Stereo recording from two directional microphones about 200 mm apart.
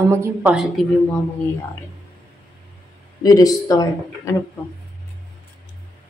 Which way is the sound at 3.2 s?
20° left (ahead or behind).